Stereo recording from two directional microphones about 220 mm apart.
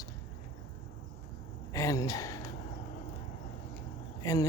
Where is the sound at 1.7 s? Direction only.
15° left (ahead or behind).